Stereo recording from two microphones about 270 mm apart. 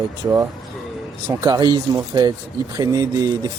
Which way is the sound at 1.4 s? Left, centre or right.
Centre.